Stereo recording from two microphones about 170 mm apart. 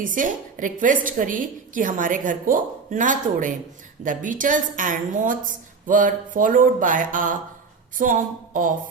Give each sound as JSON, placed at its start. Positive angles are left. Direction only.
{"t": 0.0, "sound": "a woman's voice", "side_deg": -50}